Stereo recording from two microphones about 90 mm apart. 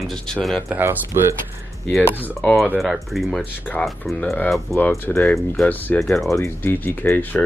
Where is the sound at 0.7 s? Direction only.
20° right (ahead or behind).